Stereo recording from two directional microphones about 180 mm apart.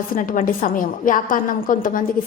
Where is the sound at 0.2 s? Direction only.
50° left (ahead or behind).